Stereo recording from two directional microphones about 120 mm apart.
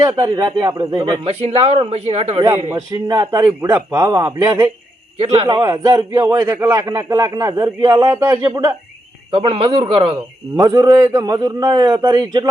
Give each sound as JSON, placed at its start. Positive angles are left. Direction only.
{"t": 0.0, "sound": "a man's voice", "side_deg": -25}
{"t": 0.4, "sound": "a man's voice", "side_deg": -45}
{"t": 2.9, "sound": "a man's voice", "side_deg": -30}
{"t": 5.1, "sound": "a man's voice", "side_deg": -55}
{"t": 5.6, "sound": "a man's voice", "side_deg": -35}
{"t": 6.4, "sound": "a man's voice", "side_deg": -20}
{"t": 6.7, "sound": "a man's voice", "side_deg": -35}
{"t": 9.3, "sound": "a man's voice", "side_deg": -50}
{"t": 10.6, "sound": "a man's voice", "side_deg": -30}